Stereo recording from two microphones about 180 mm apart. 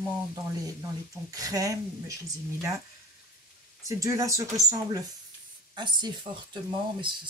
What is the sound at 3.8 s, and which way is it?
Speech, 15° right (ahead or behind).